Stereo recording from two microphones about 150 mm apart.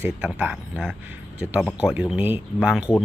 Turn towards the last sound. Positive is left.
turn(degrees=-5)  # may be behind; listen again after turning